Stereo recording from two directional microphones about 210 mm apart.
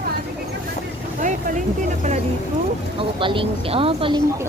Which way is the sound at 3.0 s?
25° right (ahead or behind).